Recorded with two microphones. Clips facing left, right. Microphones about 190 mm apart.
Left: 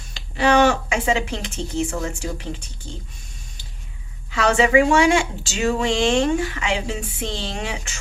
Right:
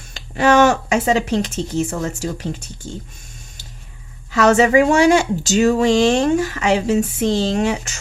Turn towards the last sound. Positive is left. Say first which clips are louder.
# right 10 dB
turn(degrees=-45)  # may be behind; listen again after turning